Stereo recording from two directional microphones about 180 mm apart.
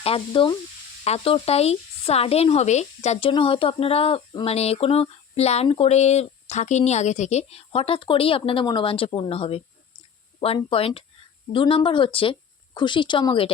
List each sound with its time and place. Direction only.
0.0 s speech: 30° left (ahead or behind)